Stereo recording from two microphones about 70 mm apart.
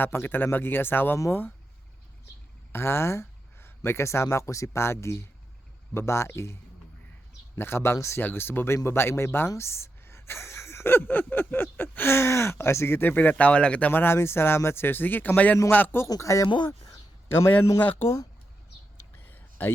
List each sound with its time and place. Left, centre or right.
0.0 s speech: left
2.7 s speech: left
8.2 s speech: left
13.3 s speech: centre
14.0 s speech: left
16.0 s speech: left
16.6 s speech: left
17.2 s a man's voice: left
19.1 s a sound: left